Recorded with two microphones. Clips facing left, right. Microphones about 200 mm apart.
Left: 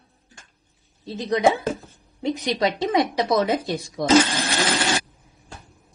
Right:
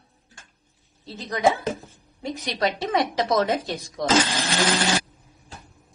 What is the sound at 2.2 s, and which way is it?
A woman's voice, 15° left (ahead or behind).